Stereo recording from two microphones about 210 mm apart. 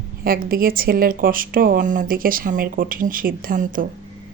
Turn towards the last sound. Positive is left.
turn(degrees=-40)  # may be behind; listen again after turning